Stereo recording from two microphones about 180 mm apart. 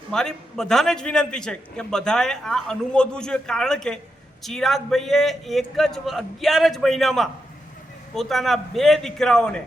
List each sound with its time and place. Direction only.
0.1 s a man's voice: 5° left (ahead or behind)